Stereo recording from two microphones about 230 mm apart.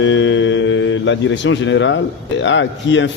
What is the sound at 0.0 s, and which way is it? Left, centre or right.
Speech, left.